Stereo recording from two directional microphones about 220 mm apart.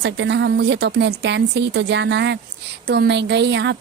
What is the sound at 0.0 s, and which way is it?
A woman's voice, 55° right (ahead or behind).